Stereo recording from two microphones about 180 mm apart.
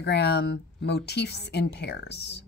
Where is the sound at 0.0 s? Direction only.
65° left (ahead or behind).